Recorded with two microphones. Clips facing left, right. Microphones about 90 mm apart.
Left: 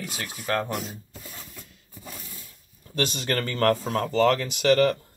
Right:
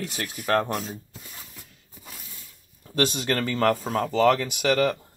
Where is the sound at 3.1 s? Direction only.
5° right (ahead or behind).